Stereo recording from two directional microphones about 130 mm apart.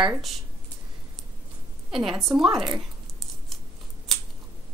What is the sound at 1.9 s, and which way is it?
Speech, centre (ahead or behind).